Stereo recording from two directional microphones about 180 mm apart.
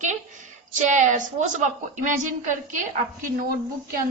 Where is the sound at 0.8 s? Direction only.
45° right (ahead or behind).